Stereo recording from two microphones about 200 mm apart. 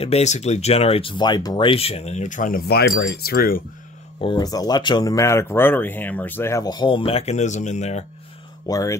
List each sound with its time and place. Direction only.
0.0 s speech: 35° left (ahead or behind)
4.2 s speech: 20° left (ahead or behind)
8.6 s speech: 15° left (ahead or behind)